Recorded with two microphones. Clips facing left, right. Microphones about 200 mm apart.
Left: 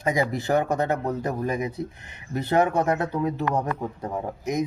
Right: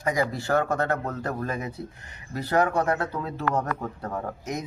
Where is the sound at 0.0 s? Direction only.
20° left (ahead or behind).